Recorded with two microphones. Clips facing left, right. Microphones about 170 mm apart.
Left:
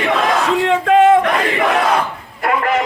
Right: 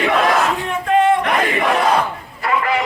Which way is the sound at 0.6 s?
90° left.